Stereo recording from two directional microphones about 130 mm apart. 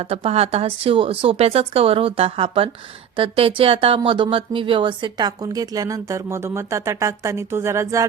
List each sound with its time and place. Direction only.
0.0 s speech: 50° right (ahead or behind); by 8.0 s 25° right (ahead or behind)